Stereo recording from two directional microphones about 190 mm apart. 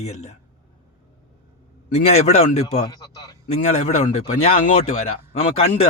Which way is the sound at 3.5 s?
40° left (ahead or behind).